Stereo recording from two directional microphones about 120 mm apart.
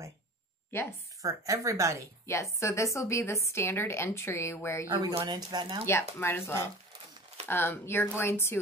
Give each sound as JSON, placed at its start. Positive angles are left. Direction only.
{"t": 1.2, "sound": "speech", "side_deg": -25}
{"t": 2.2, "sound": "a woman's voice", "side_deg": 25}
{"t": 4.8, "sound": "speech", "side_deg": -40}
{"t": 5.9, "sound": "a woman's voice", "side_deg": 20}